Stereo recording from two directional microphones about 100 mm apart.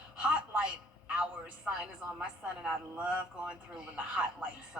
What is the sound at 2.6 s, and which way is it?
A woman's voice, 10° right (ahead or behind).